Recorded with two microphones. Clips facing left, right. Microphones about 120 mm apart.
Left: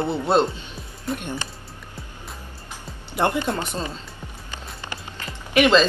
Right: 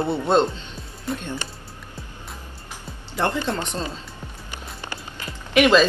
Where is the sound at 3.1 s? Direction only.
15° left (ahead or behind).